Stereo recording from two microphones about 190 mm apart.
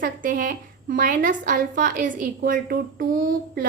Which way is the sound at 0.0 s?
45° right (ahead or behind).